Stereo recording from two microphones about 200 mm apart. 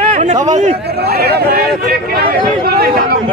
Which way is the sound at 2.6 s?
50° right (ahead or behind).